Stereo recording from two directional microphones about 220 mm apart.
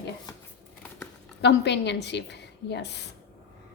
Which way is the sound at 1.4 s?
50° left (ahead or behind).